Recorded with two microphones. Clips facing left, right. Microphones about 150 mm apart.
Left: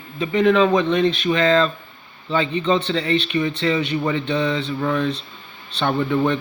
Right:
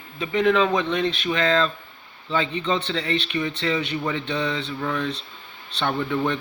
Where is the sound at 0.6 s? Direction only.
30° left (ahead or behind).